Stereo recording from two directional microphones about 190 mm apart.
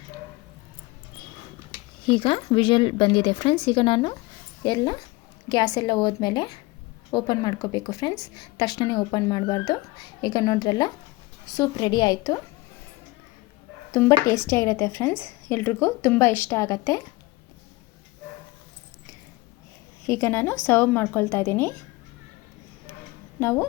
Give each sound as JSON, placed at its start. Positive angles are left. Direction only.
{"t": 2.0, "sound": "a woman's voice", "side_deg": 25}
{"t": 14.3, "sound": "speech", "side_deg": 15}
{"t": 20.1, "sound": "speech", "side_deg": 15}
{"t": 23.4, "sound": "speech", "side_deg": 10}